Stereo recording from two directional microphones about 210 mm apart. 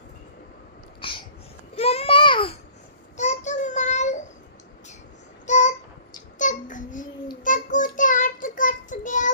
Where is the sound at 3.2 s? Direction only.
35° left (ahead or behind).